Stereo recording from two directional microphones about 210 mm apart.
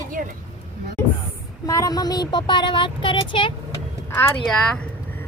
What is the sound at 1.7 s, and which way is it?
Speech, 15° left (ahead or behind).